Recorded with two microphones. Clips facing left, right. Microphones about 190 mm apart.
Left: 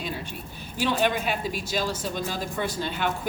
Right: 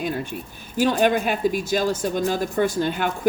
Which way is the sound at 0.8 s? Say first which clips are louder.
Right 6 dB; 45° right (ahead or behind).